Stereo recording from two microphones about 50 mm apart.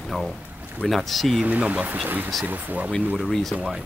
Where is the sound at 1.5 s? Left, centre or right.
Right.